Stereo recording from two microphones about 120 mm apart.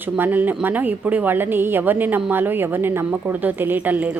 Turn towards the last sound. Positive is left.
turn(degrees=-15)  # may be behind; listen again after turning